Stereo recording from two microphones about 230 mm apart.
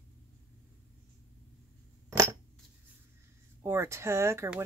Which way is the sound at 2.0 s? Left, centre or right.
Centre.